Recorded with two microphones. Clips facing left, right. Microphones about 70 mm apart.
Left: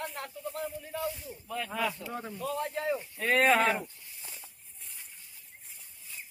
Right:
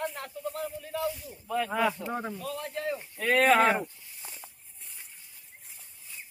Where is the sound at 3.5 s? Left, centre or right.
Centre.